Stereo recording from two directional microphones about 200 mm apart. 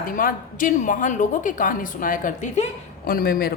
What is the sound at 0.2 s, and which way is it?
A woman's voice, 40° left (ahead or behind).